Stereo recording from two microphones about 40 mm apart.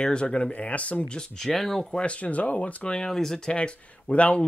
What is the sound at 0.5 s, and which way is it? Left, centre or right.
Speech, left.